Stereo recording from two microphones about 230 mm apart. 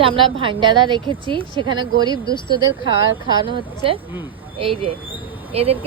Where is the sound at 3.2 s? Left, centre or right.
Right.